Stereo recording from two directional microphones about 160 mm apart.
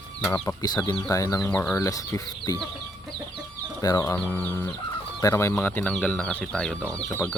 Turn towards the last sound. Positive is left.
turn(degrees=10)  # may be behind; listen again after turning